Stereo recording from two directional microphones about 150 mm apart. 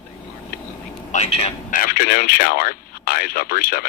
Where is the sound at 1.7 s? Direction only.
70° left (ahead or behind).